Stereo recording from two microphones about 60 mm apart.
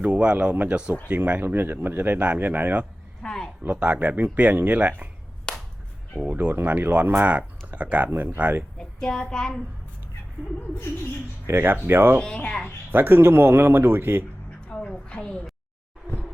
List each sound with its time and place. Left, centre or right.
0.0 s speech: right
3.2 s a sound: centre
3.7 s speech: right
5.5 s whip: centre
6.3 s speech: right
8.8 s a child's voice: centre
11.4 s speech: right
12.4 s a woman's voice: centre
12.9 s speech: right
14.7 s a woman's voice: centre